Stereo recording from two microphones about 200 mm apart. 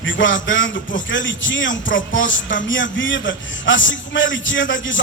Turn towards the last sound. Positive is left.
turn(degrees=70)  # may be behind; listen again after turning